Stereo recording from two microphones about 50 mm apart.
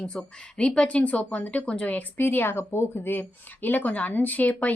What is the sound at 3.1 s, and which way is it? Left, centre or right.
A woman's voice, left.